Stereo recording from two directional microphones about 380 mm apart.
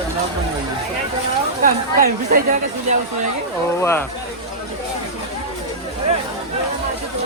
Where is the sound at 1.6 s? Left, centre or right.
Right.